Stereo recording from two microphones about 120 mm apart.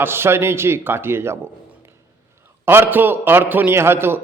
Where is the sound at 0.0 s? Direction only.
20° right (ahead or behind).